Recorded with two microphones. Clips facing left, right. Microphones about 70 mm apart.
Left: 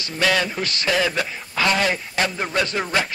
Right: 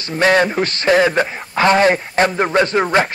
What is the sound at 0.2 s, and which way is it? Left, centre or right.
A man's voice, right.